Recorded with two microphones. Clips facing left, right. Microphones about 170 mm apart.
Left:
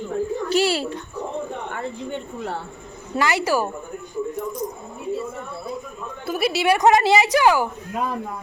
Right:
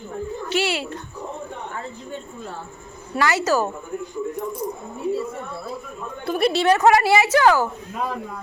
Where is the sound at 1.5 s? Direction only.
70° left (ahead or behind).